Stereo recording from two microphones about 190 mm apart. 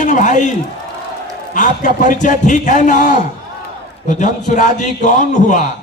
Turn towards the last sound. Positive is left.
turn(degrees=40)  # may be behind; listen again after turning